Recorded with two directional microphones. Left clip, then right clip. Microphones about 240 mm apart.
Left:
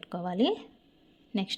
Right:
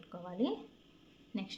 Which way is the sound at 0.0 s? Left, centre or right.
Left.